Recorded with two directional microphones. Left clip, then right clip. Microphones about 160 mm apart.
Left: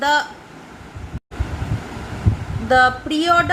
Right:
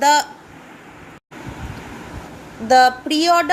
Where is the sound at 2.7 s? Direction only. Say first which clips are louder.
Right 2 dB; 35° right (ahead or behind).